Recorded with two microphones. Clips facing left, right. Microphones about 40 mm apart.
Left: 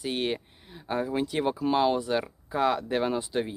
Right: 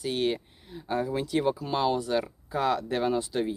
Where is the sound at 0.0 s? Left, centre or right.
Centre.